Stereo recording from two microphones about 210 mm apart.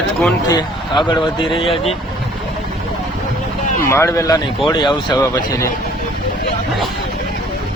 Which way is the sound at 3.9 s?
15° left (ahead or behind).